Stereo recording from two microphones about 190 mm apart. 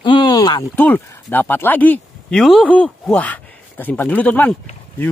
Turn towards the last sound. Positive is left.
turn(degrees=10)  # may be behind; listen again after turning